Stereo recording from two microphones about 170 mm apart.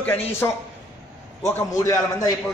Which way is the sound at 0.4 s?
15° left (ahead or behind).